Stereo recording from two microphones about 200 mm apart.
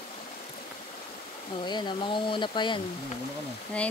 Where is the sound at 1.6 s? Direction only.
20° left (ahead or behind).